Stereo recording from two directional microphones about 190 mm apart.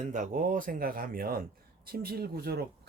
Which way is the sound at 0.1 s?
45° right (ahead or behind).